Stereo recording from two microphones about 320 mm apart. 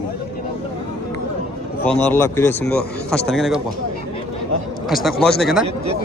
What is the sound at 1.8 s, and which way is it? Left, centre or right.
Speech, centre.